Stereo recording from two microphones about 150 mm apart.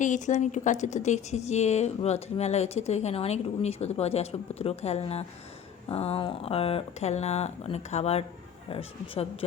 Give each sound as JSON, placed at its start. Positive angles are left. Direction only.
{"t": 0.0, "sound": "speech", "side_deg": 55}